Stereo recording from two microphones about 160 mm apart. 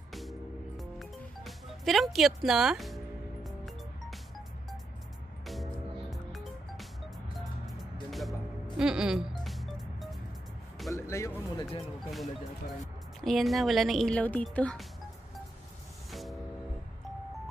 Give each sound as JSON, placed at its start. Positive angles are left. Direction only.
{"t": 0.1, "sound": "music", "side_deg": 0}
{"t": 5.5, "sound": "music", "side_deg": 0}
{"t": 8.7, "sound": "speech", "side_deg": -5}
{"t": 9.4, "sound": "music", "side_deg": 0}
{"t": 11.0, "sound": "a sound", "side_deg": 15}
{"t": 12.0, "sound": "speech", "side_deg": 0}
{"t": 16.1, "sound": "music", "side_deg": 0}